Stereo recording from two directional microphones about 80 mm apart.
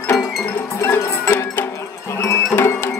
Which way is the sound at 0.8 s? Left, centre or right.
Left.